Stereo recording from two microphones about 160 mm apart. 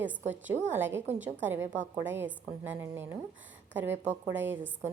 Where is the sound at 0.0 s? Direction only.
10° right (ahead or behind).